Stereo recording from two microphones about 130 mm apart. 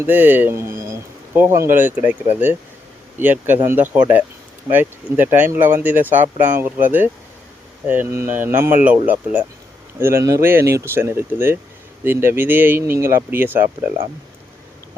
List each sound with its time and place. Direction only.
0.0 s speech: 15° right (ahead or behind)